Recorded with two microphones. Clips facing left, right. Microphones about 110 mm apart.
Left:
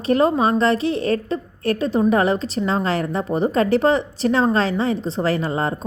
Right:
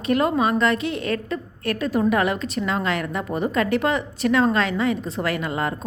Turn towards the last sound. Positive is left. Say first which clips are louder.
# left 4 dB
turn(degrees=30)  # may be behind; listen again after turning